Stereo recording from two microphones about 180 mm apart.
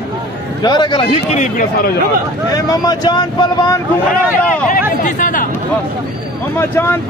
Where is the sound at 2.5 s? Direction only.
20° left (ahead or behind).